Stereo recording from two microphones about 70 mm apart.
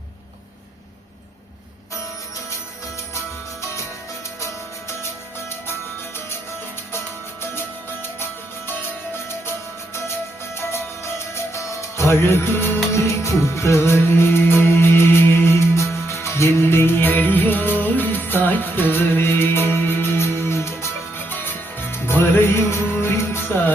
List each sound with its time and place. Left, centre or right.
10.6 s music: left
12.2 s music: left
21.2 s music: left